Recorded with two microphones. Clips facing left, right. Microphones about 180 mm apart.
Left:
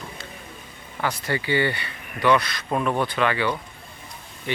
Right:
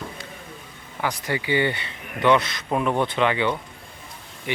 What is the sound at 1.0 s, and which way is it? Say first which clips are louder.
Speech: even; 15° right (ahead or behind).